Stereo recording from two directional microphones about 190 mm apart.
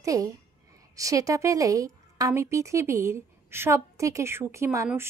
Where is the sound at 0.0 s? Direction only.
15° right (ahead or behind).